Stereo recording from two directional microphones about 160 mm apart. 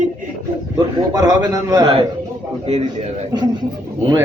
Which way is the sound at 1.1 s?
20° right (ahead or behind).